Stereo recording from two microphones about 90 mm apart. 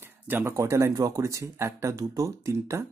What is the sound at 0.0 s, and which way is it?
Speech, 25° right (ahead or behind).